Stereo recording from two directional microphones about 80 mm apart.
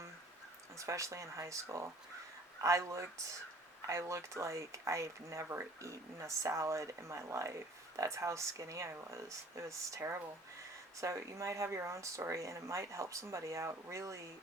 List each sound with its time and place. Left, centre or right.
0.8 s speech: right
2.6 s speech: right